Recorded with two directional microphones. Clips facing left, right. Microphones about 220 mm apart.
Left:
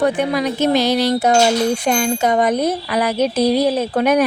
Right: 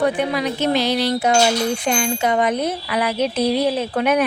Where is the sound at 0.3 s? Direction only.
45° left (ahead or behind).